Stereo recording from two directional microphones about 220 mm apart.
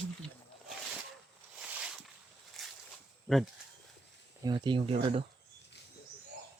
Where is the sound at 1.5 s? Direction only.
5° right (ahead or behind).